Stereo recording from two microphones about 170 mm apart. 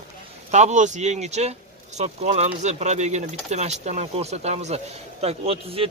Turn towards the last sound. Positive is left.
turn(degrees=-35)  # may be behind; listen again after turning